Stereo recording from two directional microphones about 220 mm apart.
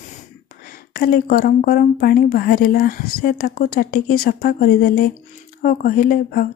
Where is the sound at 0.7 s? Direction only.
40° left (ahead or behind).